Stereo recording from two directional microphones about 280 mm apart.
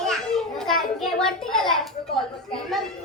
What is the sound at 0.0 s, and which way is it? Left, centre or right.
Children playing, centre.